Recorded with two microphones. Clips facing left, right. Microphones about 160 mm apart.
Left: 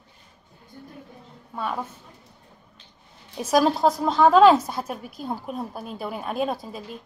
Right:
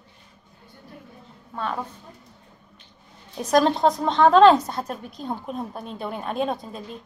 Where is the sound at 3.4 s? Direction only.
5° left (ahead or behind).